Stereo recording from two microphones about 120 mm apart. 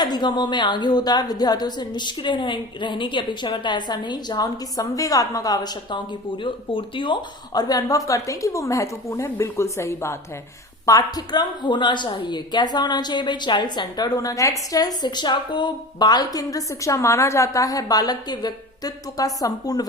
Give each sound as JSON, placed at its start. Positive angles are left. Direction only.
{"t": 0.0, "sound": "speech", "side_deg": 40}
{"t": 6.4, "sound": "speech", "side_deg": 45}